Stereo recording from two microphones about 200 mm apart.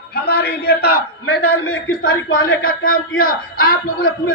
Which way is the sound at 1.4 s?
90° left.